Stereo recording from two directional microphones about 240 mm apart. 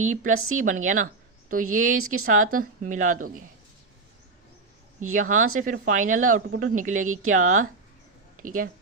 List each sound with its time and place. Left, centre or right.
0.0 s speech: right
2.0 s speech: right
2.2 s speech: right
5.1 s speech: right